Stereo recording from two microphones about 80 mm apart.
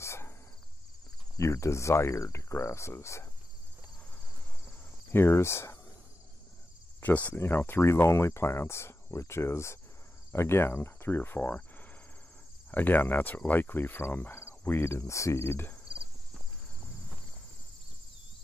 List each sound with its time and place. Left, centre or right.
0.0 s insect: left
1.4 s speech: left
5.1 s speech: left
7.0 s speech: left
12.7 s speech: left